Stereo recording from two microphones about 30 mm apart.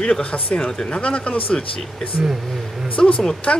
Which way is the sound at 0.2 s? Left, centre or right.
Left.